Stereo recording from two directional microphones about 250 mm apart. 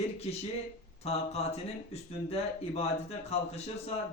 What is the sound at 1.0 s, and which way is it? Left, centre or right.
Speech, left.